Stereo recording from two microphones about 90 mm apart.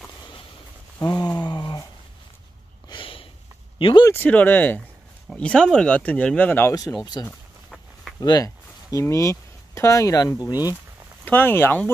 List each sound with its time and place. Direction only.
0.9 s a sound: 45° left (ahead or behind)
2.9 s sniff: 80° left
3.7 s speech: 75° left (ahead or behind)
4.1 s speech: 20° left (ahead or behind)
7.2 s speech: 45° left (ahead or behind)
10.3 s speech: 45° left (ahead or behind)
11.2 s speech: 20° left (ahead or behind)